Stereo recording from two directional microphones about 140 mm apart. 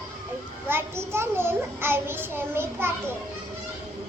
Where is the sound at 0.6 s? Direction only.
15° right (ahead or behind).